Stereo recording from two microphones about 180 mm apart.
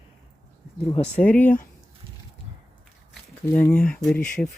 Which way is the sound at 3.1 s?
10° left (ahead or behind).